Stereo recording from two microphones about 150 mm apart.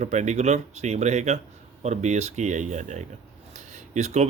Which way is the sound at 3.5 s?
50° right (ahead or behind).